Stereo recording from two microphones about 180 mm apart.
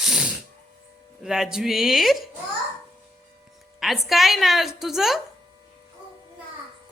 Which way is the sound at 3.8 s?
Centre (ahead or behind).